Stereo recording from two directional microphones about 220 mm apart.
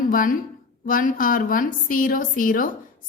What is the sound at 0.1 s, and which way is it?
A woman's voice, 40° left (ahead or behind).